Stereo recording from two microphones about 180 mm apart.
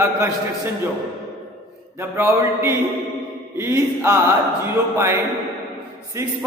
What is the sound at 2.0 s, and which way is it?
A man's voice, 15° right (ahead or behind).